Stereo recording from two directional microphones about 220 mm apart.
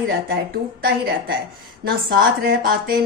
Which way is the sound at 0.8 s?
40° right (ahead or behind).